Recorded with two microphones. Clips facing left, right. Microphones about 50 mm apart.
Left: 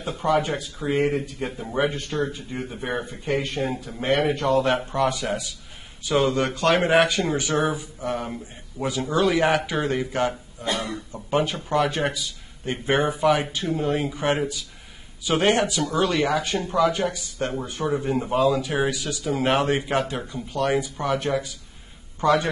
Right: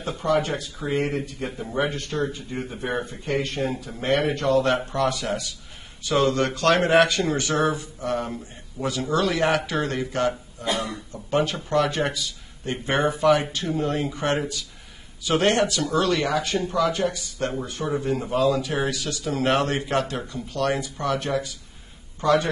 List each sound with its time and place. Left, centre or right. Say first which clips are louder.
0.2 s a man's voice: left 1 dB; centre
2.2 s speech: right 1 dB; centre
3.1 s a man's voice: left 1 dB; centre
10.6 s a sound: right 1 dB; right
10.9 s a sound: left 2 dB; centre
11.3 s a man's voice: even; centre
15.8 s a man's voice: even; centre
22.2 s a man's voice: even; left